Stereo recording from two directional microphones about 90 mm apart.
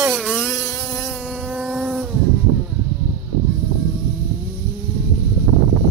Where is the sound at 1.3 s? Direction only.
5° left (ahead or behind).